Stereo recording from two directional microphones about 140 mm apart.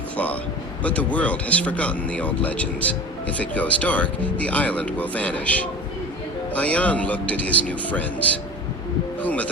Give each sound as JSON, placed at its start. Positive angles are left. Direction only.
{"t": 0.8, "sound": "speech", "side_deg": 10}